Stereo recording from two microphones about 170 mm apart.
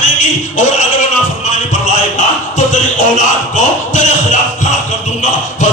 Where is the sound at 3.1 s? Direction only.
50° left (ahead or behind).